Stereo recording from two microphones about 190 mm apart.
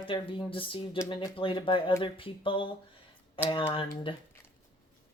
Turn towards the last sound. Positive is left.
turn(degrees=25)  # may be behind; listen again after turning